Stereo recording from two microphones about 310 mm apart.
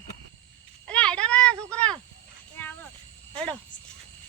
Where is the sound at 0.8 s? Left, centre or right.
Centre.